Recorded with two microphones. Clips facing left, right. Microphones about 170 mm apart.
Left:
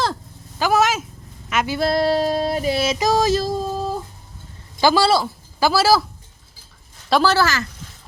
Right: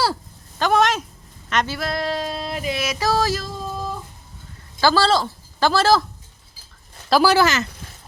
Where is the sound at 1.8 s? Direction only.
35° left (ahead or behind).